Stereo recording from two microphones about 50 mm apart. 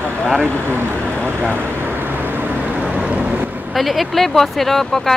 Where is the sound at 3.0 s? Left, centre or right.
Right.